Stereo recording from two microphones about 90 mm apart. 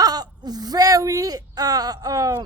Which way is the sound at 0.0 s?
45° right (ahead or behind).